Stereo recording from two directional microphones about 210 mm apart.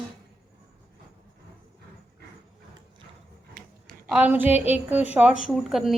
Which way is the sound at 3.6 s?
45° right (ahead or behind).